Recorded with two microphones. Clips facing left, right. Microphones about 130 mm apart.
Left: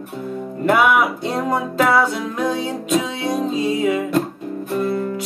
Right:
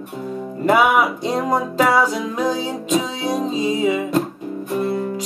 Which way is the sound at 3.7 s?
55° left (ahead or behind).